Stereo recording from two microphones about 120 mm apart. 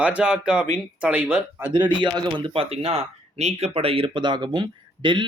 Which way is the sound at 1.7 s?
40° right (ahead or behind).